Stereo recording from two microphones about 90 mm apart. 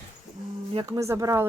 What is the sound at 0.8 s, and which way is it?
Speech, 40° right (ahead or behind).